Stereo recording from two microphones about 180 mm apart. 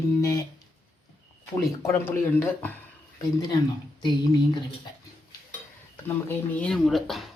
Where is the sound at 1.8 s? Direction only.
10° left (ahead or behind).